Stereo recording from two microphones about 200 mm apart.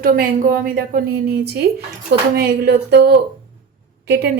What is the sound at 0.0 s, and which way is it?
A woman's voice, 45° right (ahead or behind).